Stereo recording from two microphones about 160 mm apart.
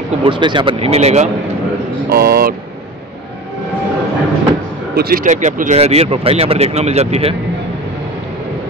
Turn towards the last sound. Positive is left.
turn(degrees=-40)  # may be behind; listen again after turning